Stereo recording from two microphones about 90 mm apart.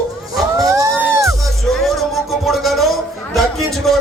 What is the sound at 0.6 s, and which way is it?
Music, 40° right (ahead or behind).